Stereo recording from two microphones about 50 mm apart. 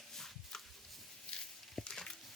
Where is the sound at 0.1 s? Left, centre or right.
Centre.